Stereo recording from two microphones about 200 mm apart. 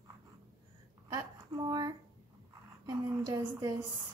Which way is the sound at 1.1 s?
20° right (ahead or behind).